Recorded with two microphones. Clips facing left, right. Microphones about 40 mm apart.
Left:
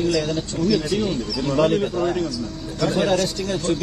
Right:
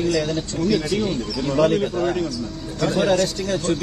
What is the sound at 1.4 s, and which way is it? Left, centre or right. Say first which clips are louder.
Speech: right 1 dB; left.